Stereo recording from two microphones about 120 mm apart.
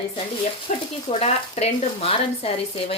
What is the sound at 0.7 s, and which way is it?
Speech, 70° left (ahead or behind).